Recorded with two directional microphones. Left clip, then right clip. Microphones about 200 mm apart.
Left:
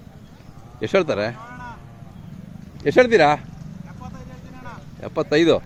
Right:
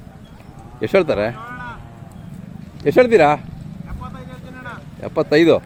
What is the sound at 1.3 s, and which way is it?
Cattle, 45° left (ahead or behind).